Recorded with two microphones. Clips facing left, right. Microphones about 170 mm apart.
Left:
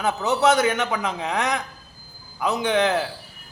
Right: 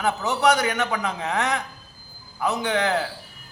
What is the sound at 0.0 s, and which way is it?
Speech, 20° left (ahead or behind).